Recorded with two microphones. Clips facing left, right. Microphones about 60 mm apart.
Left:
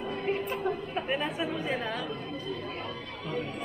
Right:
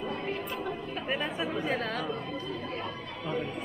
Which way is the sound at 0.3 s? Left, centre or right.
Left.